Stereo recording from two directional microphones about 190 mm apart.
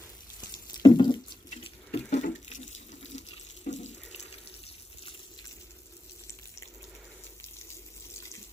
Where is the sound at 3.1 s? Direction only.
40° left (ahead or behind).